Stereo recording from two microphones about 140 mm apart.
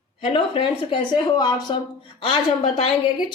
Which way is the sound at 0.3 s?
40° left (ahead or behind).